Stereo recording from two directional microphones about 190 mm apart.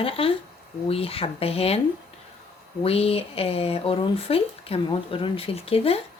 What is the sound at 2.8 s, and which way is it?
Speech, 30° left (ahead or behind).